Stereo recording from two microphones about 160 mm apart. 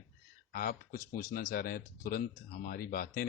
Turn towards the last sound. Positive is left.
turn(degrees=65)  # may be behind; listen again after turning